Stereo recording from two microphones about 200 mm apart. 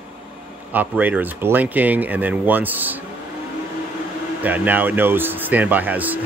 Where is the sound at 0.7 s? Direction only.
10° right (ahead or behind).